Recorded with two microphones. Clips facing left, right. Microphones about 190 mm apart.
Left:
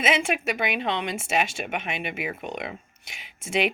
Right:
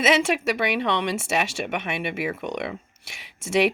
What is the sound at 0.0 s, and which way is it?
Speech, 75° right (ahead or behind).